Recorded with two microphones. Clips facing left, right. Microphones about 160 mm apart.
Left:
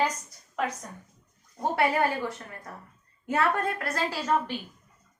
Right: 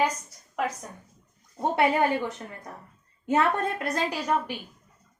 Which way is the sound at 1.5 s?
20° right (ahead or behind).